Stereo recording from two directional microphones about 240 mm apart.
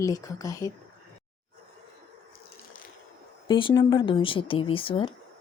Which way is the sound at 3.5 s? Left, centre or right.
Left.